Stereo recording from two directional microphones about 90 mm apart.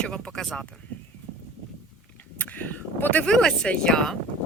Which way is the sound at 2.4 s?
20° left (ahead or behind).